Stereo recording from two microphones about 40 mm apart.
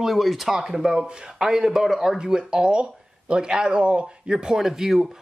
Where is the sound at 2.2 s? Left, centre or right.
Centre.